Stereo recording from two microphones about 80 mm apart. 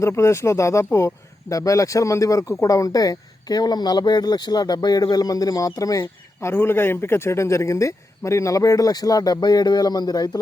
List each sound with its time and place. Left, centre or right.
0.0 s speech: left
6.5 s speech: left